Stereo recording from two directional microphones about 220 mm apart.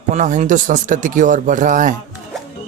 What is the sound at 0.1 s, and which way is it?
Speech, 35° right (ahead or behind).